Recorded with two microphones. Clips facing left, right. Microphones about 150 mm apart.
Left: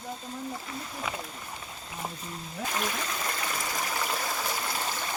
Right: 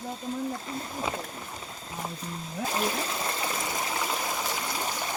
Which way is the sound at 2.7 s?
30° right (ahead or behind).